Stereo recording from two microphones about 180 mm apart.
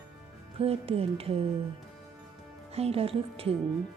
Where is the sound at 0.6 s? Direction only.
30° right (ahead or behind).